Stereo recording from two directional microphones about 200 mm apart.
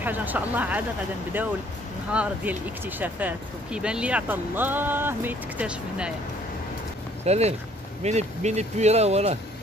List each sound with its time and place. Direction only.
0.0 s speech: 10° right (ahead or behind)
2.1 s speech: 10° right (ahead or behind)
7.2 s speech: 30° right (ahead or behind)